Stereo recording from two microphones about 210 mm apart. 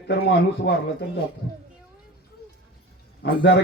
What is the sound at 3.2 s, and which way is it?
Speech, 50° left (ahead or behind).